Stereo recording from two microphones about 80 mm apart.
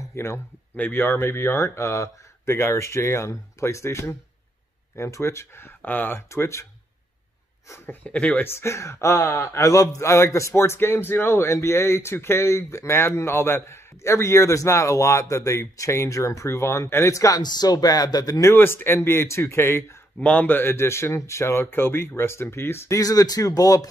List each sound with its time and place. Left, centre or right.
0.1 s a man's voice: left
5.8 s a man's voice: left
7.7 s speech: left
8.5 s a man's voice: left
9.4 s a man's voice: left
17.4 s speech: left
18.5 s a man's voice: left
20.2 s a man's voice: centre; by 22.9 s left
22.9 s speech: left